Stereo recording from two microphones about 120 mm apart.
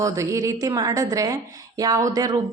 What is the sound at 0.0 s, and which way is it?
A woman's voice, 25° right (ahead or behind).